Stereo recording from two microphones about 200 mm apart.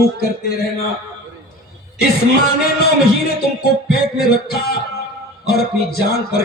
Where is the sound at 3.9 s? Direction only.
50° left (ahead or behind).